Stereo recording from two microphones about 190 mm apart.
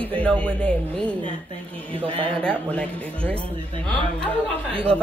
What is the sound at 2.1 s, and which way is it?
Speech, 30° right (ahead or behind).